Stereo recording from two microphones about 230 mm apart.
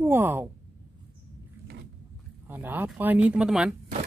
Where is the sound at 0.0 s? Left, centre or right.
Centre.